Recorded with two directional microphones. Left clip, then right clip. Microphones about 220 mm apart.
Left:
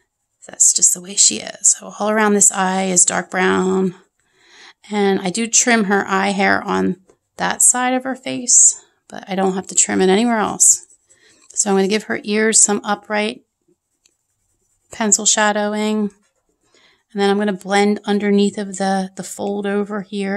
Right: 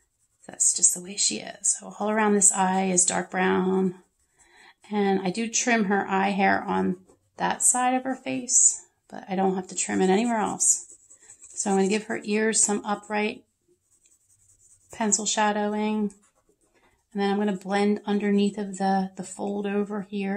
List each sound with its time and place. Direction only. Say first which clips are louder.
0.5 s speech: left 9 dB; 35° left (ahead or behind)
14.9 s speech: left 9 dB; 40° left (ahead or behind)
17.1 s speech: left 9 dB; 40° left (ahead or behind)